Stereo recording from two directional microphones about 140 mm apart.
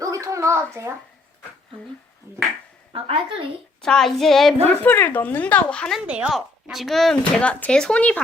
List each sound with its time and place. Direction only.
0.0 s a sound: 20° right (ahead or behind)
2.9 s speech: 40° right (ahead or behind)
3.8 s speech: 5° left (ahead or behind)
4.8 s speech: 15° left (ahead or behind)
6.1 s speech: 5° right (ahead or behind); by 8.2 s 10° left (ahead or behind)